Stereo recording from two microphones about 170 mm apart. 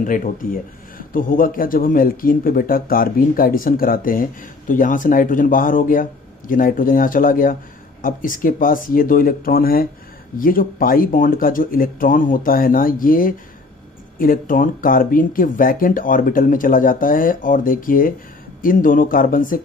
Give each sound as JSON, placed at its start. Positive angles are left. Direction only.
{"t": 0.0, "sound": "speech", "side_deg": 50}